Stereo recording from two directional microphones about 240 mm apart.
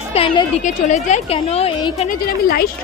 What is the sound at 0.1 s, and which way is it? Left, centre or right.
A woman's voice, left.